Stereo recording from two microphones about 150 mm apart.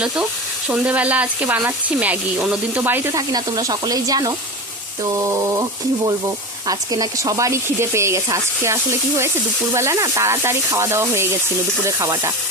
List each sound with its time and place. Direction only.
0.7 s speech: 10° right (ahead or behind)
6.7 s speech: 25° right (ahead or behind)